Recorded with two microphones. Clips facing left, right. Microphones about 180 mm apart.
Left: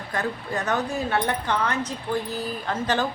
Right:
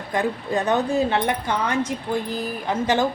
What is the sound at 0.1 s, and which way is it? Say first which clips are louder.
A woman's voice: right 5 dB; 15° right (ahead or behind).